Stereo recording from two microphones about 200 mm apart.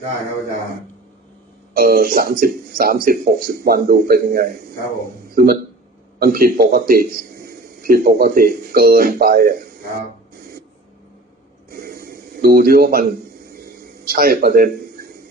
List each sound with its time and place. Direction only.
1.7 s speech: 45° right (ahead or behind)
11.7 s a sound: 45° right (ahead or behind)
14.1 s a man's voice: 45° right (ahead or behind)